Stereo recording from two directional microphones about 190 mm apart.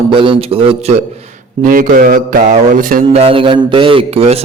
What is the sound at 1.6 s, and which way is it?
Mantra, 45° right (ahead or behind).